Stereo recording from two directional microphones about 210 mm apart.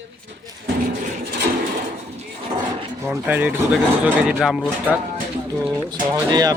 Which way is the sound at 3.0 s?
10° right (ahead or behind).